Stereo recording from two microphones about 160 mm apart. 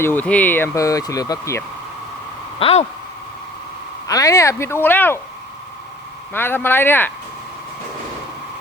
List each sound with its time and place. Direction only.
0.0 s speech: 10° left (ahead or behind)
2.6 s speech: 35° left (ahead or behind)
4.0 s speech: 20° left (ahead or behind)
6.3 s speech: 15° left (ahead or behind)